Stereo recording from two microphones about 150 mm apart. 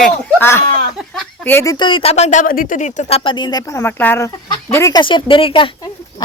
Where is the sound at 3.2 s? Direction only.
35° left (ahead or behind).